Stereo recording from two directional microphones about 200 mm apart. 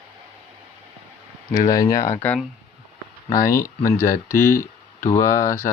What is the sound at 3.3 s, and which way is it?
Speech, 15° left (ahead or behind).